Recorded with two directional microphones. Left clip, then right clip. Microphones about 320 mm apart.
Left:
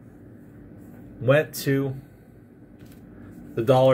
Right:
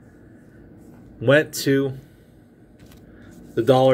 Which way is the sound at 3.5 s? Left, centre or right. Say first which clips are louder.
Right 2 dB; right.